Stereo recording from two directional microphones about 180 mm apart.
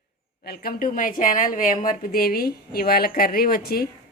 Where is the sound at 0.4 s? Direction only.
60° left (ahead or behind).